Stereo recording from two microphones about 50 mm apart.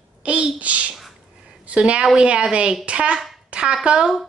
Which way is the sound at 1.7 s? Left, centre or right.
Right.